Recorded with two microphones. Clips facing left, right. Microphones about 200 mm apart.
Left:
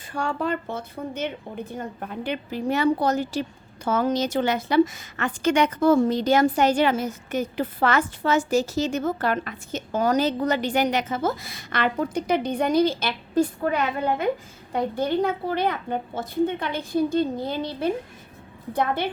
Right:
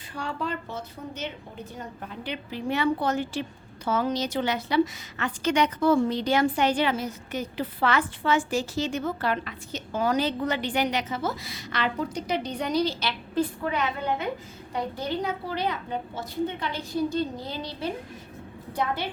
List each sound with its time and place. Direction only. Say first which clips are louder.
0.1 s a woman's voice: left 5 dB; 50° left (ahead or behind)